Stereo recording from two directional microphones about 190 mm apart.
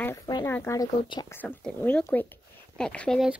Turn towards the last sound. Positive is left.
turn(degrees=0)  # may be behind; listen again after turning